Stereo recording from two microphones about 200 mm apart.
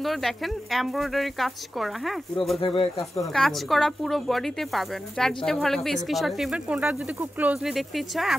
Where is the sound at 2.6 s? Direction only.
25° left (ahead or behind).